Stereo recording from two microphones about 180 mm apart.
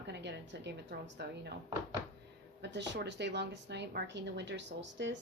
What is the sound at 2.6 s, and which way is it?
A woman's voice, 75° right (ahead or behind).